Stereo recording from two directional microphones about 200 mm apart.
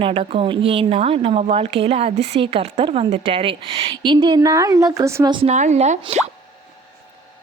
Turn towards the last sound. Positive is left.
turn(degrees=-35)  # may be behind; listen again after turning